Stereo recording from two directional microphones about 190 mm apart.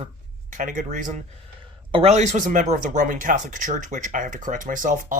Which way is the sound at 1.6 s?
30° right (ahead or behind).